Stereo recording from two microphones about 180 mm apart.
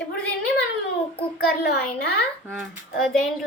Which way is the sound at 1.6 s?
65° left (ahead or behind).